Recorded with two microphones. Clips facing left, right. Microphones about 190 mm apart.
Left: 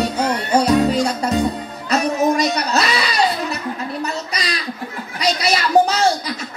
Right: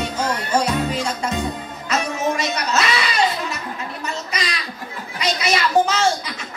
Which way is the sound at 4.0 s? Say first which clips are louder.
Left 3 dB; 35° left (ahead or behind).